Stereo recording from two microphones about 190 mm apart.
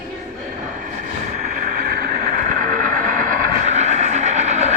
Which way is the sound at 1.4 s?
40° right (ahead or behind).